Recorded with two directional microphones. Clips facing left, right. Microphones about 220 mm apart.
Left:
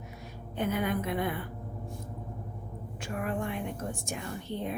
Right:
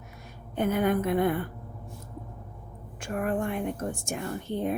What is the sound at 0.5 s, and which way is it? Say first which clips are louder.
Speech: right 5 dB; 50° right (ahead or behind).